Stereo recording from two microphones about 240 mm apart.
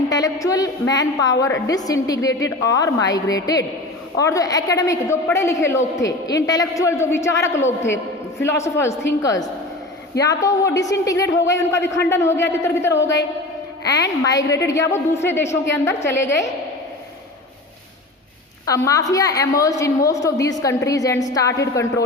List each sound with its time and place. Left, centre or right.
0.1 s a woman's voice: centre
18.6 s a woman's voice: centre